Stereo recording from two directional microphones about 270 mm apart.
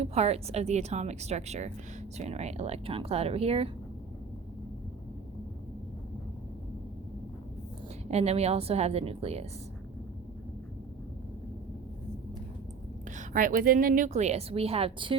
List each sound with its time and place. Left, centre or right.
0.0 s a woman's voice: right
8.1 s a woman's voice: right
13.1 s a woman's voice: right